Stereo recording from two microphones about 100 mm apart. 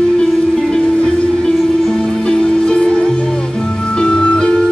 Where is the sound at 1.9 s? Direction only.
5° left (ahead or behind).